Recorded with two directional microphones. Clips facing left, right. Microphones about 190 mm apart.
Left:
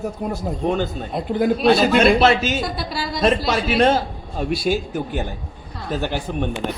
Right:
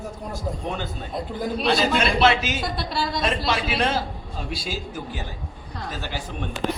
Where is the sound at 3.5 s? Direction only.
50° left (ahead or behind).